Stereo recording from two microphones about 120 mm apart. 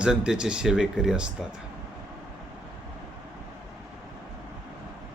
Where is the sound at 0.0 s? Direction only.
5° right (ahead or behind).